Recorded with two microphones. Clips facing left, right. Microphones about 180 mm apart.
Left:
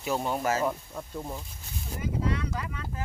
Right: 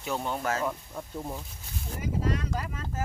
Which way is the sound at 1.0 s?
5° right (ahead or behind).